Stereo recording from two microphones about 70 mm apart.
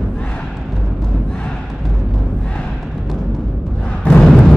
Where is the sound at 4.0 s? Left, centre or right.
Centre.